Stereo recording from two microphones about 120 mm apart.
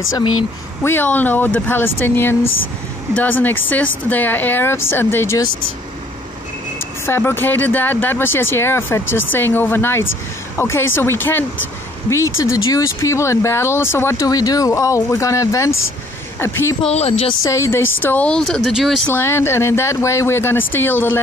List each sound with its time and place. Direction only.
0.8 s speech: 15° left (ahead or behind)
7.1 s speech: 20° left (ahead or behind)
16.8 s speech: 65° left (ahead or behind)
17.4 s speech: 25° left (ahead or behind); by 19.0 s centre (ahead or behind)
19.1 s speech: 20° left (ahead or behind)